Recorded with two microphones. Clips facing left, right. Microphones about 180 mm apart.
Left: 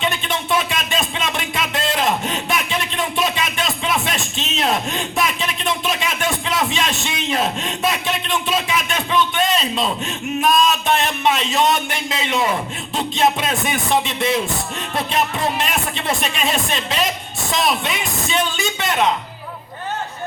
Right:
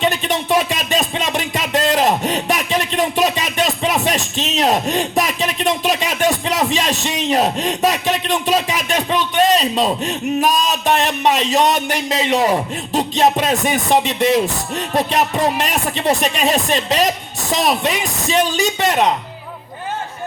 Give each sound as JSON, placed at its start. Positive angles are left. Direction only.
{"t": 0.0, "sound": "music", "side_deg": -40}
{"t": 17.5, "sound": "speech", "side_deg": -40}